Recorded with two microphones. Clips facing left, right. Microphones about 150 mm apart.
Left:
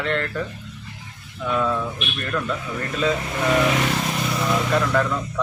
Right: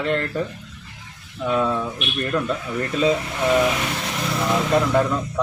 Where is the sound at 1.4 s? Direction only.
25° right (ahead or behind).